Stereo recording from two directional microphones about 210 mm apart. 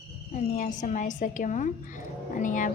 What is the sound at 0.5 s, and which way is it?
A woman's voice, 35° left (ahead or behind).